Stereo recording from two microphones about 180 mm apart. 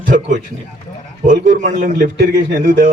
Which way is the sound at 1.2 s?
45° right (ahead or behind).